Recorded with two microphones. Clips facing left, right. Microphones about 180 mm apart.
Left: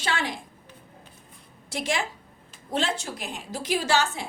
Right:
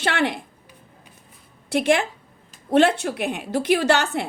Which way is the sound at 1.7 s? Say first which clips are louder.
Right 9 dB; 60° right (ahead or behind).